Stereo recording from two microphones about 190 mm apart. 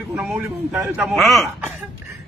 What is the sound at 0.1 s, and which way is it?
A man's voice, 10° right (ahead or behind).